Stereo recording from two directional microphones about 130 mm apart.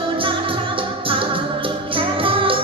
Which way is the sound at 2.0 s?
45° right (ahead or behind).